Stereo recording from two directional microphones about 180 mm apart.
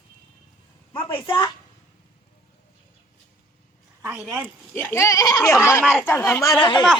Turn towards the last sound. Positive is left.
turn(degrees=25)  # may be behind; listen again after turning